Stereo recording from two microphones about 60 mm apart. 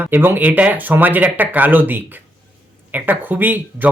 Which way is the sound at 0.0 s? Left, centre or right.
Right.